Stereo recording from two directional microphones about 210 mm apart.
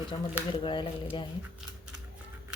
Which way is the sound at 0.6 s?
20° left (ahead or behind).